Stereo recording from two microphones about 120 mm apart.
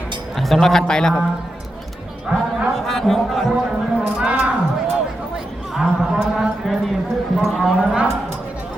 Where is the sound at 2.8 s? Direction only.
Centre (ahead or behind).